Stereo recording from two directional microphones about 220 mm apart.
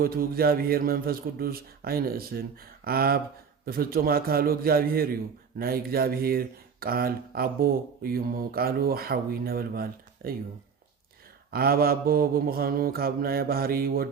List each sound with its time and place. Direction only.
0.0 s speech: 45° right (ahead or behind)
11.5 s speech: 45° right (ahead or behind)